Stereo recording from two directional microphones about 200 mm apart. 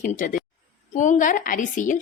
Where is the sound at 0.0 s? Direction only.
40° left (ahead or behind).